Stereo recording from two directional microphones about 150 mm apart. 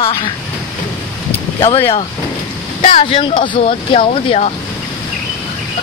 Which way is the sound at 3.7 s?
40° left (ahead or behind).